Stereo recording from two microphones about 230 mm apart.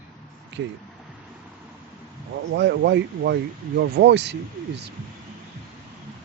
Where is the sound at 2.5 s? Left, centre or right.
Right.